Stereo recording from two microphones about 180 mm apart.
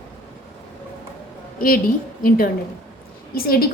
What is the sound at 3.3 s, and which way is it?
Speech, 55° left (ahead or behind).